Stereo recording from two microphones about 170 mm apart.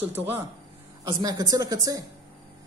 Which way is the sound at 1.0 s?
20° right (ahead or behind).